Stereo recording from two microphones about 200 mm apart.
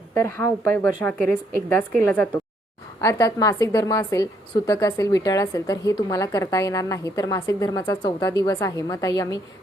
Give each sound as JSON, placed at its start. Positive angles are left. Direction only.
{"t": 0.1, "sound": "a woman's voice", "side_deg": 10}